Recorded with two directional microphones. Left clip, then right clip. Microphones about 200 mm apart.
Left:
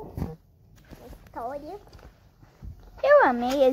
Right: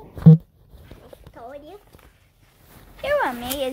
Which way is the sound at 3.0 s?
20° left (ahead or behind).